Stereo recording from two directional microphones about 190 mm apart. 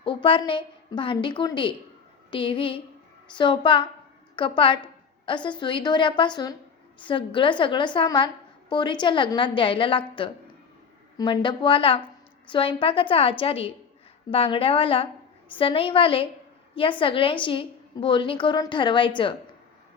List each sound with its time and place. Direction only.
0.0 s a woman's voice: 25° left (ahead or behind)